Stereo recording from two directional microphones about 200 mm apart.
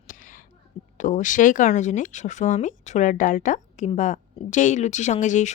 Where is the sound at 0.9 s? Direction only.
40° left (ahead or behind).